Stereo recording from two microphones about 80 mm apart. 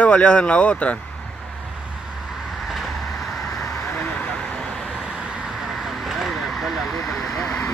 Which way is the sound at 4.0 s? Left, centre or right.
Centre.